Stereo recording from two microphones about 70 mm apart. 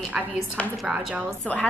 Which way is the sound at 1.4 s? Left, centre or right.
Centre.